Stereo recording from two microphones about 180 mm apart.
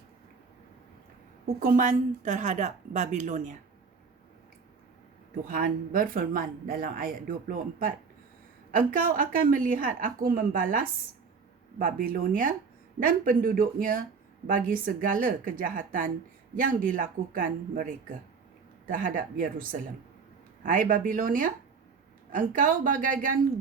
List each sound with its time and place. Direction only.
1.5 s speech: 55° right (ahead or behind)
5.5 s speech: 55° right (ahead or behind)